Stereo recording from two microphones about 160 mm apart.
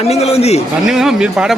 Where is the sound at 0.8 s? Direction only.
5° right (ahead or behind).